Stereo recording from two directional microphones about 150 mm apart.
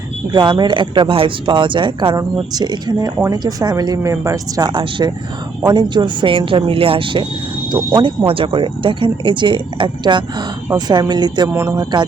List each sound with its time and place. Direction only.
0.3 s speech: 30° right (ahead or behind)